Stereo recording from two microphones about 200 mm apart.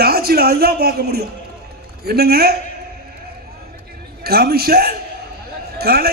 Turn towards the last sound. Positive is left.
turn(degrees=-50)  # may be behind; listen again after turning